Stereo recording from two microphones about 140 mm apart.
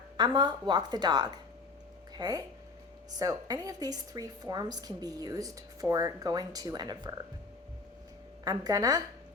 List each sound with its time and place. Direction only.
0.2 s a woman's voice: 30° right (ahead or behind)
8.4 s a woman's voice: 25° right (ahead or behind)